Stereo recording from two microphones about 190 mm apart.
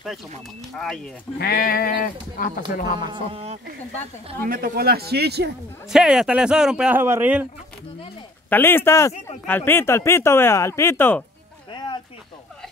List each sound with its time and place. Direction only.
0.7 s speech: 5° left (ahead or behind)
1.4 s speech: 50° left (ahead or behind)
3.1 s speech: 30° right (ahead or behind)
4.5 s speech: 50° right (ahead or behind)
5.9 s speech: 5° right (ahead or behind)
8.5 s speech: 10° left (ahead or behind)